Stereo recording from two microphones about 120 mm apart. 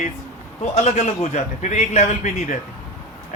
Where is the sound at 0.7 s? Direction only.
75° left (ahead or behind).